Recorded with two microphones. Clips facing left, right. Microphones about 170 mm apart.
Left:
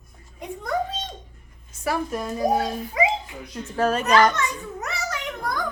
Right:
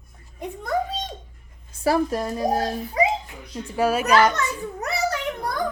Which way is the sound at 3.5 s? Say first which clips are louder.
Right 1 dB; 10° right (ahead or behind).